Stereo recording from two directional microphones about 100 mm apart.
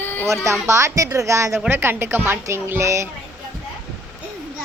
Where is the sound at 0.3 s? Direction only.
30° right (ahead or behind).